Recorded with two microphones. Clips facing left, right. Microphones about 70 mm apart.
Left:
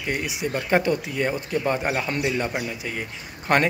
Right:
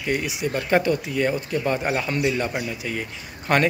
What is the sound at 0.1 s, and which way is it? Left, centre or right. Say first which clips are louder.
Speech: right 2 dB; left.